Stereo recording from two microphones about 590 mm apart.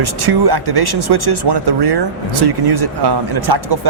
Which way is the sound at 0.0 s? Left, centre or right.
Right.